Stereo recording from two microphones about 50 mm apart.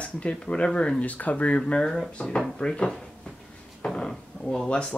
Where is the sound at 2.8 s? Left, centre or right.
Centre.